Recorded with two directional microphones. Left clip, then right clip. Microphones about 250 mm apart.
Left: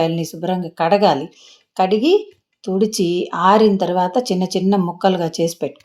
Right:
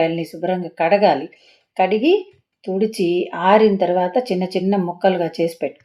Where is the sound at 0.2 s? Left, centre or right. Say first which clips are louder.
Even; left.